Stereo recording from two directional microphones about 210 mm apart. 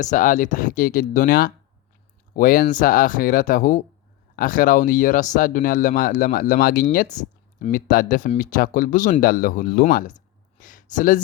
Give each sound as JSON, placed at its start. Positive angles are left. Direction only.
{"t": 0.0, "sound": "speech", "side_deg": 40}
{"t": 10.6, "sound": "a sound", "side_deg": 40}
{"t": 10.9, "sound": "speech", "side_deg": 40}